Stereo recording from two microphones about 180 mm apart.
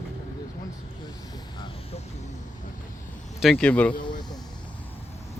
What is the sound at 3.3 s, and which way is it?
Speech, centre (ahead or behind).